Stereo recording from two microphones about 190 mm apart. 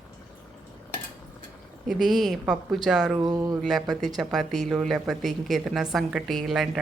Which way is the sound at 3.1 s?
20° right (ahead or behind).